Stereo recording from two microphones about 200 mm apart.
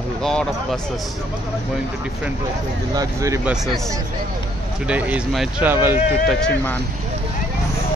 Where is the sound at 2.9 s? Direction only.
15° right (ahead or behind).